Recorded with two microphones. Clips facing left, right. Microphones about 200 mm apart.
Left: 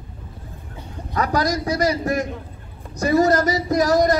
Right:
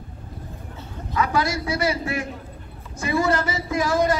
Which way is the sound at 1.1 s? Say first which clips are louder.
Left 2 dB; 40° left (ahead or behind).